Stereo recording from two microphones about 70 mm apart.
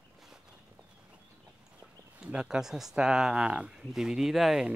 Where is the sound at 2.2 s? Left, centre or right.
Centre.